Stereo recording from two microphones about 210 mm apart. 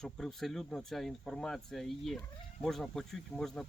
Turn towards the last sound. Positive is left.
turn(degrees=0)  # may be behind; listen again after turning